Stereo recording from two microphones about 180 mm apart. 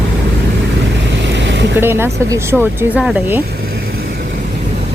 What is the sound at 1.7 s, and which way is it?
Speech, 10° right (ahead or behind).